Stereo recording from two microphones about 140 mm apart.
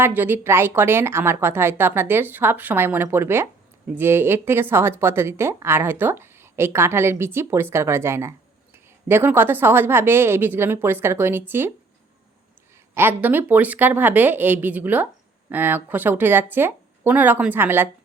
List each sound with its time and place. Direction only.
0.0 s a woman's voice: 15° right (ahead or behind)
12.9 s a woman's voice: 15° right (ahead or behind)